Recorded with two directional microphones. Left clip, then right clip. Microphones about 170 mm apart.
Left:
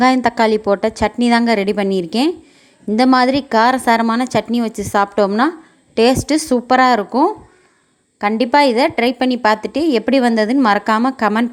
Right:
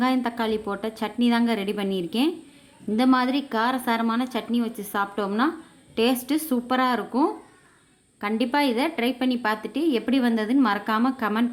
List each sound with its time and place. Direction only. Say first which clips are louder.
0.0 s a woman's voice: left 12 dB; 40° left (ahead or behind)